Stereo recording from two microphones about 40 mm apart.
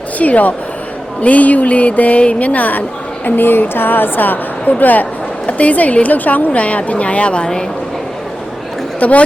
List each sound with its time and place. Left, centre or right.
0.2 s a woman's voice: left
3.2 s a woman's voice: left
9.0 s speech: left